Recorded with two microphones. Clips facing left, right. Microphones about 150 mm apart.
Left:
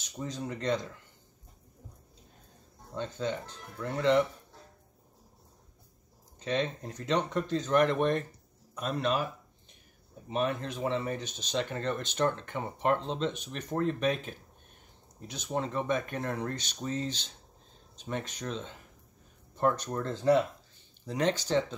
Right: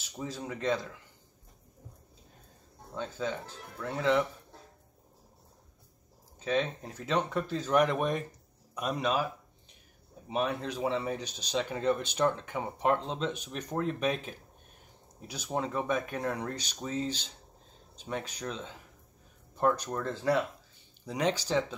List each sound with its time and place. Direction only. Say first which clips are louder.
0.0 s speech: left 1 dB; 5° right (ahead or behind)
3.0 s speech: left 1 dB; 5° right (ahead or behind)
6.4 s speech: right 1 dB; 5° right (ahead or behind)
10.3 s speech: even; 10° right (ahead or behind)
21.0 s speech: left 1 dB; 10° right (ahead or behind)